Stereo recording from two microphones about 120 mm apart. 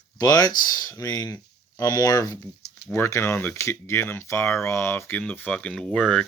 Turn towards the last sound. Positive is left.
turn(degrees=5)  # may be behind; listen again after turning